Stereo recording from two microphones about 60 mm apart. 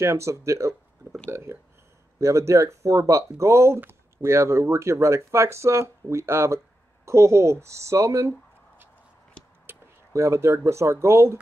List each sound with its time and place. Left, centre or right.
0.0 s speech: right
2.1 s speech: right
9.7 s a sound: right
10.1 s speech: right